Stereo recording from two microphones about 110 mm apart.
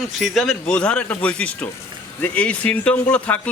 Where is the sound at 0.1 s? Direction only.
Centre (ahead or behind).